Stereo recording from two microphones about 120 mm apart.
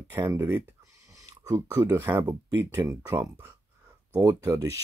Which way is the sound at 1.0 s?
30° right (ahead or behind).